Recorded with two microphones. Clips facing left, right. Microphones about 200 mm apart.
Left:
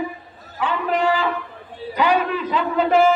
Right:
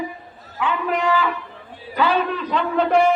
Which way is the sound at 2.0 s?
10° left (ahead or behind).